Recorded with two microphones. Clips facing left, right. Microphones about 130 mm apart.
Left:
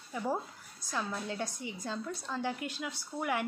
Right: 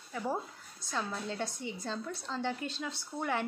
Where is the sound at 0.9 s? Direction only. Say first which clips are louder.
Even; 10° left (ahead or behind).